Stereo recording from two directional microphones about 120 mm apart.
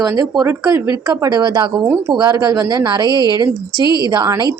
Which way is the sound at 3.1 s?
30° left (ahead or behind).